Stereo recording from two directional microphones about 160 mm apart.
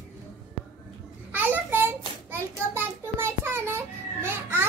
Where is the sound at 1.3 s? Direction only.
10° right (ahead or behind).